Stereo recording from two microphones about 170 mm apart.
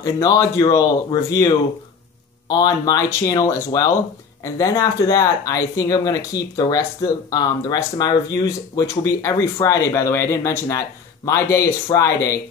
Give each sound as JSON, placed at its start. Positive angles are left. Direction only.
{"t": 0.0, "sound": "speech", "side_deg": 20}
{"t": 2.5, "sound": "speech", "side_deg": 25}